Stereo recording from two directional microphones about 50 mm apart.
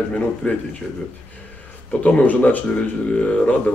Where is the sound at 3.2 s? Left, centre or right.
Left.